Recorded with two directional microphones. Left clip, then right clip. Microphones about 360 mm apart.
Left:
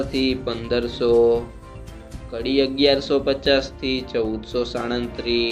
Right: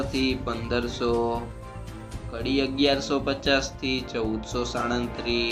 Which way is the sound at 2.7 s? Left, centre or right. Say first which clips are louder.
Left 5 dB; right.